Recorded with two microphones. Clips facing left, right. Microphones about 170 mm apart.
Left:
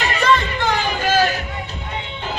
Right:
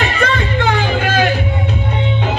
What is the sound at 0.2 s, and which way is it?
Music, 60° right (ahead or behind).